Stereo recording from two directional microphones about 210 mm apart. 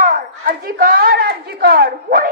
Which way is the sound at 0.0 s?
40° right (ahead or behind).